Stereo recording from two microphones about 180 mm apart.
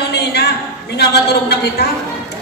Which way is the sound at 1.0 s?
65° left (ahead or behind).